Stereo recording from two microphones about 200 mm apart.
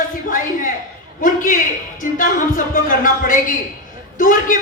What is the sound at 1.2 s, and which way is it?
A man's voice, 40° left (ahead or behind).